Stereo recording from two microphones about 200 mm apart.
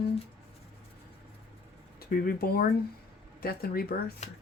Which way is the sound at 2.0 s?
50° left (ahead or behind).